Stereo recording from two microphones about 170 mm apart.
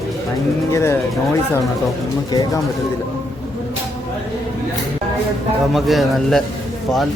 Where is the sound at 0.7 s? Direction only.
15° left (ahead or behind).